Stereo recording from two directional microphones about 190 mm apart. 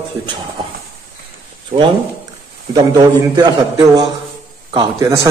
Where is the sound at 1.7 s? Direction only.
45° right (ahead or behind).